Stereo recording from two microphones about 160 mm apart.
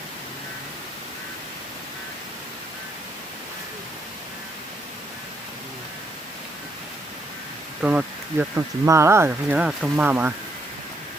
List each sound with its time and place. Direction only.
7.8 s speech: 10° right (ahead or behind)